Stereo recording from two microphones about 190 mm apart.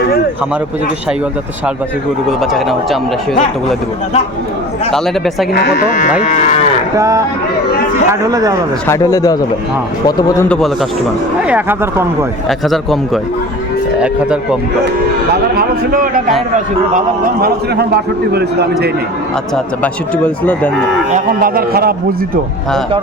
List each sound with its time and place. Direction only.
2.4 s speech: centre (ahead or behind)
4.9 s speech: centre (ahead or behind)
5.5 s speech: 55° left (ahead or behind)
6.2 s moo: 40° left (ahead or behind)
6.9 s speech: 15° right (ahead or behind)
8.9 s speech: 15° left (ahead or behind)
10.5 s speech: centre (ahead or behind)
12.5 s speech: centre (ahead or behind)
14.0 s speech: 5° right (ahead or behind)
15.5 s a man's voice: 50° right (ahead or behind)
21.1 s speech: 50° right (ahead or behind)